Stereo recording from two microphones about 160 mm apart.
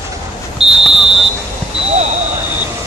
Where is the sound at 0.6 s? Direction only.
40° right (ahead or behind).